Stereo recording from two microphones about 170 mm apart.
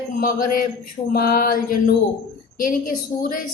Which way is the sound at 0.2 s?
55° left (ahead or behind).